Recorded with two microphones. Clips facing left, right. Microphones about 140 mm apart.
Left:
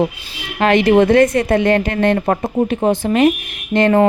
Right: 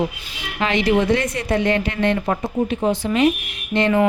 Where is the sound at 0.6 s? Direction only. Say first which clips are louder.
Left 7 dB; 55° left (ahead or behind).